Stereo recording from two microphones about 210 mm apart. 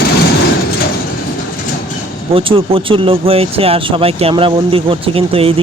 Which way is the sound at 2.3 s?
25° right (ahead or behind).